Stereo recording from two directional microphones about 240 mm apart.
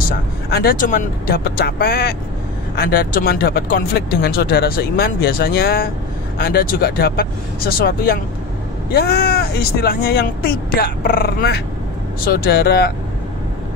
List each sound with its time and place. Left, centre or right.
0.5 s speech: left